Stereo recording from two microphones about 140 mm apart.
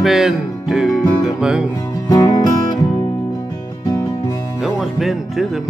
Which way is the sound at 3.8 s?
25° left (ahead or behind).